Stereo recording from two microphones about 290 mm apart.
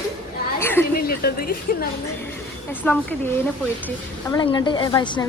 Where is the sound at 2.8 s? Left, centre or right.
Centre.